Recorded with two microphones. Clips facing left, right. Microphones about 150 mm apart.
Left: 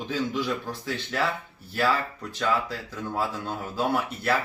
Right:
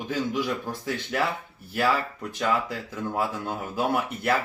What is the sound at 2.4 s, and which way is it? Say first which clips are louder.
Speech: even; 15° right (ahead or behind).